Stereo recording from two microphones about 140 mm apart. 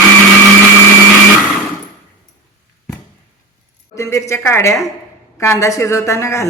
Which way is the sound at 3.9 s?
20° left (ahead or behind).